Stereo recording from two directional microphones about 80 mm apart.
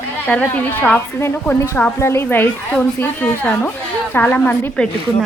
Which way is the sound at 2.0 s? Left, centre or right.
Left.